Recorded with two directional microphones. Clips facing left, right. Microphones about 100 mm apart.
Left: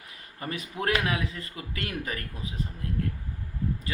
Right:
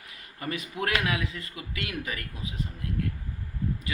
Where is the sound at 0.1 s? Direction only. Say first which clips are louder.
Right 1 dB; 35° left (ahead or behind).